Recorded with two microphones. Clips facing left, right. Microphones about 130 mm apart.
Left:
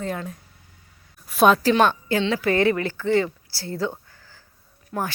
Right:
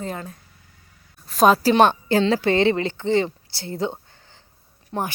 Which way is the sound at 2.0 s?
35° right (ahead or behind).